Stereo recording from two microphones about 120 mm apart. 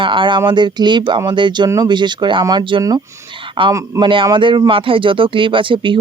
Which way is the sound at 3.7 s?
25° right (ahead or behind).